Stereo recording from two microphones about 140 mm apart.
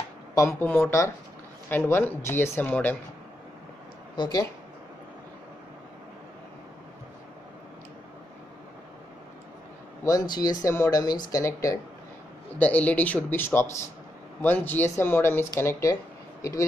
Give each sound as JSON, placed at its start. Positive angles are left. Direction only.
{"t": 0.3, "sound": "speech", "side_deg": 20}
{"t": 4.2, "sound": "speech", "side_deg": 30}
{"t": 10.0, "sound": "speech", "side_deg": 25}
{"t": 12.5, "sound": "speech", "side_deg": 10}